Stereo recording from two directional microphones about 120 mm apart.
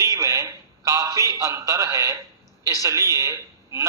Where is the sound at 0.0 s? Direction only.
25° right (ahead or behind).